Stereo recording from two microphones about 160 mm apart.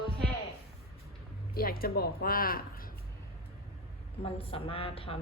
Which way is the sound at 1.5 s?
65° left (ahead or behind).